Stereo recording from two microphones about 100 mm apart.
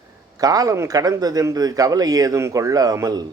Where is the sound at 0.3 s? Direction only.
40° right (ahead or behind).